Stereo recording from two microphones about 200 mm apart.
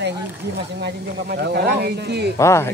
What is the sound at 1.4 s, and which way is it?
Speech, 55° right (ahead or behind).